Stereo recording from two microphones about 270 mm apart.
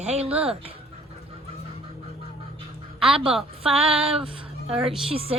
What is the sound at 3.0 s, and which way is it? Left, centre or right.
A woman's voice, right.